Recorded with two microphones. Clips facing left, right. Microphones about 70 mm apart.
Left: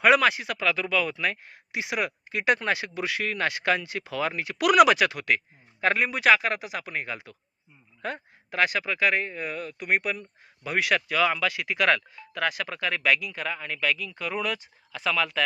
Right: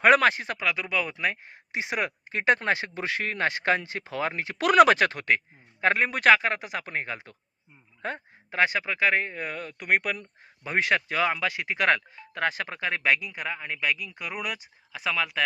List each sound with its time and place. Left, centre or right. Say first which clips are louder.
0.0 s speech: right 1 dB; right
0.6 s speech: left 3 dB; centre
6.1 s speech: right 2 dB; right
10.6 s speech: even; right